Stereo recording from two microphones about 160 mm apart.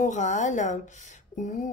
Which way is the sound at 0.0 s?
50° left (ahead or behind).